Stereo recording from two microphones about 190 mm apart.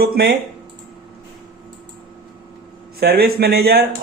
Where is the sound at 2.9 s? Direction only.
55° right (ahead or behind).